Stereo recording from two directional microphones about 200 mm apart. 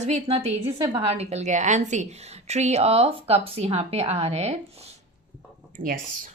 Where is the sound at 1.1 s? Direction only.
30° right (ahead or behind).